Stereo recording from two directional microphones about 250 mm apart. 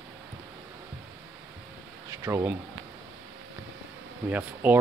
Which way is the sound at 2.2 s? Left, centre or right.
Centre.